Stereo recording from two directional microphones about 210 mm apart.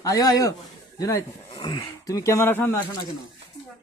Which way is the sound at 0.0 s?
15° left (ahead or behind).